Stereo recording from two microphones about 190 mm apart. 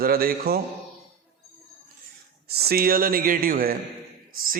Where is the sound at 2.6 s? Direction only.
50° right (ahead or behind).